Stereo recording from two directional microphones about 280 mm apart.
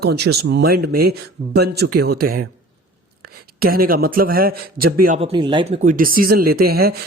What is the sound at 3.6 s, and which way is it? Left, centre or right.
A man's voice, right.